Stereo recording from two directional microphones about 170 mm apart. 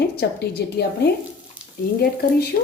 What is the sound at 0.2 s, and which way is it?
Speech, 75° left (ahead or behind).